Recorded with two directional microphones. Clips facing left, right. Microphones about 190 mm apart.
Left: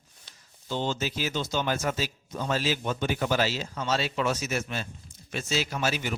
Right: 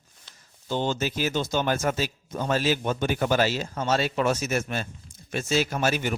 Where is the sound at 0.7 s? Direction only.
55° right (ahead or behind).